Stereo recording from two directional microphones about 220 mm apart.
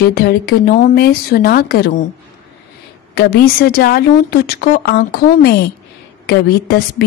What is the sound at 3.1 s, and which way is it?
A woman's voice, 45° left (ahead or behind).